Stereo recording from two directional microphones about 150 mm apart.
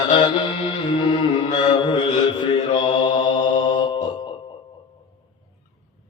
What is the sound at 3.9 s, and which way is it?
Music, 30° left (ahead or behind).